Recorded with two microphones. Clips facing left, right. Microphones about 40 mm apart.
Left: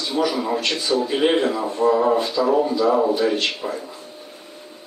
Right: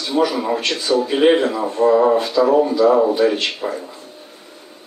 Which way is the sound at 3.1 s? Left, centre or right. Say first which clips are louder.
Right 3 dB; right.